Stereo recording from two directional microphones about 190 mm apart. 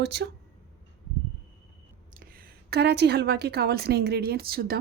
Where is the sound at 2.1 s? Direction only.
50° right (ahead or behind).